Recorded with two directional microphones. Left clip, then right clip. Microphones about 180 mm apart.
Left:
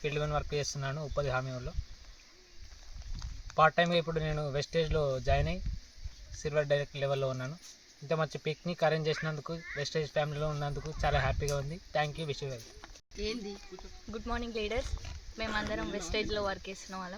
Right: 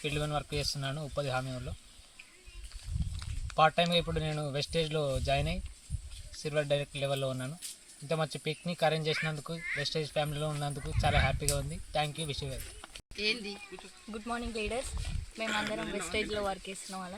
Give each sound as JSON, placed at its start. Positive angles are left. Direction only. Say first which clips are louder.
{"t": 0.0, "sound": "speech", "louder": "left 1 dB", "side_deg": 10}
{"t": 3.5, "sound": "speech", "louder": "even", "side_deg": 10}
{"t": 13.1, "sound": "speech", "louder": "right 5 dB", "side_deg": 50}
{"t": 14.1, "sound": "speech", "louder": "even", "side_deg": -5}
{"t": 15.9, "sound": "speech", "louder": "even", "side_deg": -10}
{"t": 16.9, "sound": "speech", "louder": "left 1 dB", "side_deg": 5}